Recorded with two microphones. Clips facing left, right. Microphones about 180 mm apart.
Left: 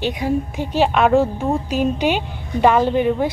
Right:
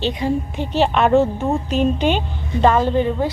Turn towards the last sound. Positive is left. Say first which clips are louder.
# left 1 dB
turn(degrees=15)  # may be behind; listen again after turning